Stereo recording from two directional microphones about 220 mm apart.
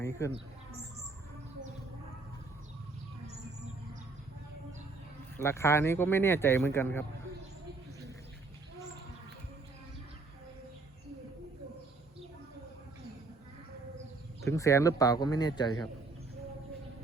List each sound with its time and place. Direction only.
0.0 s speech: 10° left (ahead or behind)
5.4 s speech: 10° left (ahead or behind)
14.4 s speech: 15° left (ahead or behind)